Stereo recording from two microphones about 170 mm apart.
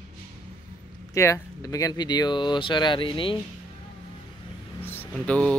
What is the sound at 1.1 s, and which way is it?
Speech, 20° left (ahead or behind).